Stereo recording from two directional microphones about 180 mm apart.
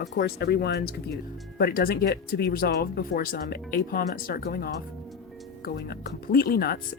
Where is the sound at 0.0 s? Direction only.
70° left (ahead or behind).